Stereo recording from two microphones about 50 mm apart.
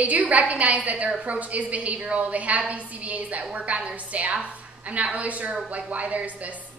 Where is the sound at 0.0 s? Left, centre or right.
Right.